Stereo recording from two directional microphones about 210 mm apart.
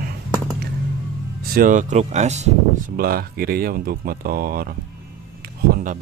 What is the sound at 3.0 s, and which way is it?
Speech, 45° right (ahead or behind).